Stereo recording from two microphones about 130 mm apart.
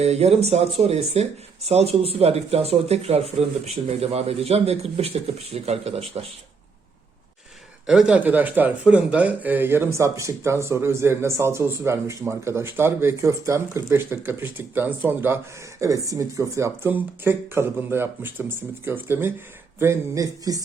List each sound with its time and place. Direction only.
0.0 s speech: 55° right (ahead or behind)
7.9 s speech: 5° right (ahead or behind)
15.8 s speech: 25° right (ahead or behind)